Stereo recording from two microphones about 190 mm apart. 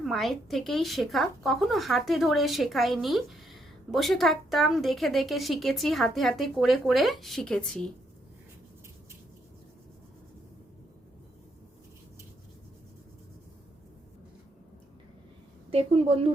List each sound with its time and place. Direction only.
0.0 s a woman's voice: centre (ahead or behind)
15.7 s speech: 30° right (ahead or behind)